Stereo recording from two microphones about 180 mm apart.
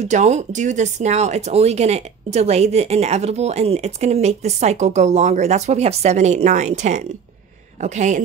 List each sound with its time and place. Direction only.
0.0 s speech: 40° right (ahead or behind)